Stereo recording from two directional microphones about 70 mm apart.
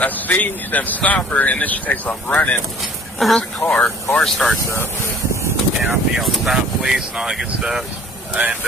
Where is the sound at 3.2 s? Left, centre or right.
Centre.